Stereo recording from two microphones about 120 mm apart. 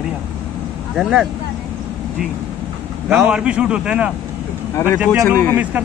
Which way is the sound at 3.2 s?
10° right (ahead or behind).